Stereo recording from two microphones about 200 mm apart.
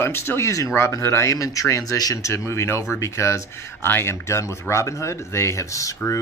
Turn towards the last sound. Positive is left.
turn(degrees=15)  # may be behind; listen again after turning